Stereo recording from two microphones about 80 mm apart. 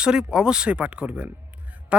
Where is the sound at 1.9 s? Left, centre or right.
Centre.